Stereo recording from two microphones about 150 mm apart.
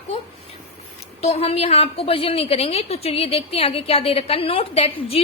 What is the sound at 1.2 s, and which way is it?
A woman's voice, 40° left (ahead or behind).